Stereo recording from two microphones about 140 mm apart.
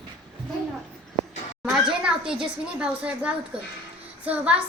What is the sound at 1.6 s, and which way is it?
A woman's voice, centre (ahead or behind).